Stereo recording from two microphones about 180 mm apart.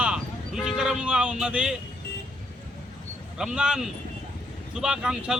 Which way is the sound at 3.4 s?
5° right (ahead or behind).